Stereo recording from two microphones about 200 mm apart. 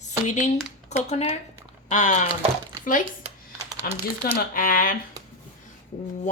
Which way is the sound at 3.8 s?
45° left (ahead or behind).